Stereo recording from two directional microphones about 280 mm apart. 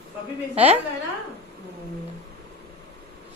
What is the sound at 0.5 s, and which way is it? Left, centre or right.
Speech, right.